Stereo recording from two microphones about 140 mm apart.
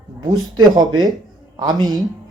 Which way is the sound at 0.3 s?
30° right (ahead or behind).